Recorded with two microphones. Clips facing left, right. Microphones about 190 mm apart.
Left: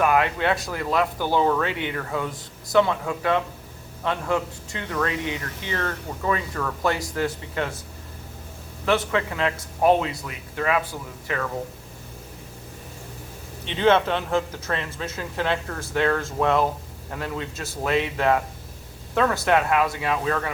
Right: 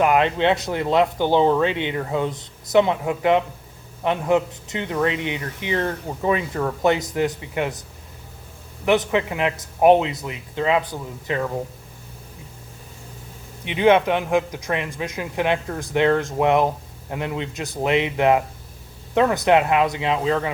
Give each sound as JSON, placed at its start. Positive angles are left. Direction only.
{"t": 0.0, "sound": "speech", "side_deg": -20}
{"t": 8.8, "sound": "speech", "side_deg": -20}
{"t": 13.7, "sound": "a man's voice", "side_deg": -15}